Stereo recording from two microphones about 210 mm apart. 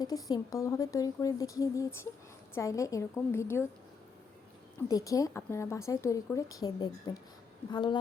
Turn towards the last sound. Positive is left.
turn(degrees=20)  # may be behind; listen again after turning